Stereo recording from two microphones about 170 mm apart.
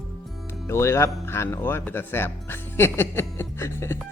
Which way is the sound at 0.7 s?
15° left (ahead or behind).